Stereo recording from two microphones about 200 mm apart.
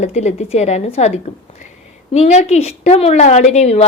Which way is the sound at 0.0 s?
35° left (ahead or behind).